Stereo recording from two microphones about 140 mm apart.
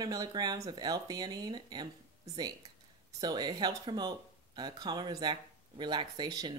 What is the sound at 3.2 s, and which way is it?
Speech, 30° right (ahead or behind).